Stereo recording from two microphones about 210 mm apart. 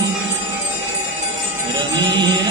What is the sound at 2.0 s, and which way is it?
Music, 20° right (ahead or behind).